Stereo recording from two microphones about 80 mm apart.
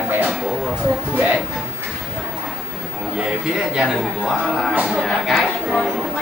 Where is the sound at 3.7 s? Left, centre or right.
Centre.